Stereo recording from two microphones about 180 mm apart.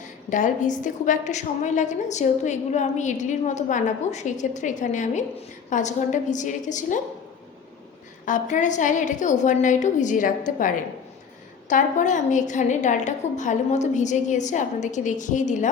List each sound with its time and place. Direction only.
0.3 s a woman's voice: 45° left (ahead or behind)
8.2 s a woman's voice: 45° left (ahead or behind)